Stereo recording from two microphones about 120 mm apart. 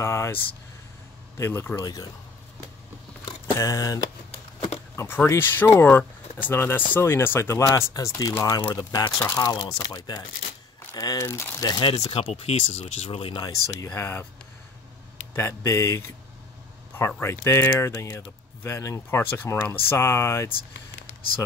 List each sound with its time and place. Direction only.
0.0 s speech: 20° left (ahead or behind)
1.4 s speech: 20° left (ahead or behind)
3.5 s speech: 25° left (ahead or behind)
4.9 s speech: 20° left (ahead or behind)
11.8 s speech: 50° left (ahead or behind)
13.5 s speech: 30° left (ahead or behind)
15.3 s speech: 20° left (ahead or behind)